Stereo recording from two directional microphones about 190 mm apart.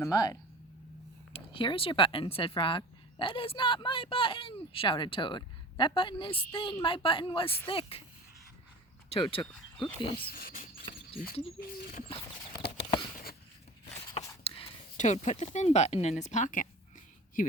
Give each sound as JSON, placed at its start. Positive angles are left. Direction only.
{"t": 0.0, "sound": "speech", "side_deg": 20}
{"t": 1.3, "sound": "speech", "side_deg": 30}
{"t": 7.4, "sound": "speech", "side_deg": 10}
{"t": 7.7, "sound": "speech", "side_deg": 30}
{"t": 9.0, "sound": "speech", "side_deg": 30}
{"t": 9.4, "sound": "speech", "side_deg": 0}
{"t": 10.2, "sound": "speech", "side_deg": 50}
{"t": 12.0, "sound": "horse", "side_deg": 30}
{"t": 14.4, "sound": "speech", "side_deg": 35}